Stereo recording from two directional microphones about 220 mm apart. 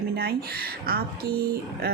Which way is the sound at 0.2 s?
45° right (ahead or behind).